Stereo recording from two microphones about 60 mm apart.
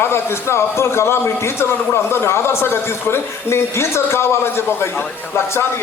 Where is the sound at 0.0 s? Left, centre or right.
Left.